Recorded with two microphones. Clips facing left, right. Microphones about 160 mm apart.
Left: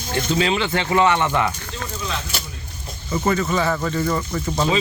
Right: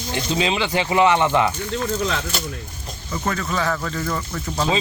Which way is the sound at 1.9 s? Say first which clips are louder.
Right 4 dB; 70° right (ahead or behind).